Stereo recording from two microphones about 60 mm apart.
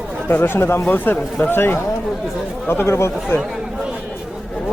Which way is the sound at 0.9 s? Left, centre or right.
Left.